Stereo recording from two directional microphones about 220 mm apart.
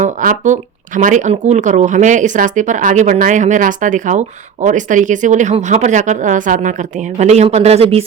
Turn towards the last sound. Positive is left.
turn(degrees=-25)  # may be behind; listen again after turning